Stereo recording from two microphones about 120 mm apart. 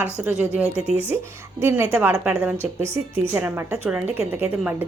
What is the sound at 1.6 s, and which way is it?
A woman's voice, 20° right (ahead or behind).